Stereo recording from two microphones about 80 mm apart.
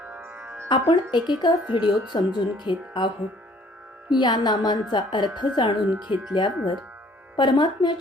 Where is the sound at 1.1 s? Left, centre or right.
Left.